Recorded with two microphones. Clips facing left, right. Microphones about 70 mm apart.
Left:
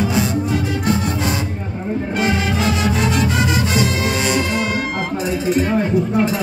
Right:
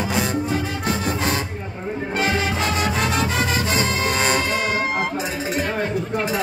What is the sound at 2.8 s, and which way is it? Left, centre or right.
Music, right.